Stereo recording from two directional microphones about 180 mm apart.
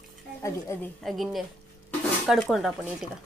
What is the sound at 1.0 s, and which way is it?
Speech, centre (ahead or behind).